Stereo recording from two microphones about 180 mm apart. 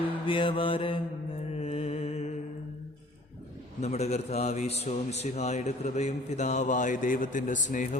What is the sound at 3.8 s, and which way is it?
A man's voice, 35° left (ahead or behind).